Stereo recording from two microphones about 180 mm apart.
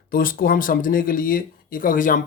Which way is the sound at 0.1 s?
55° left (ahead or behind).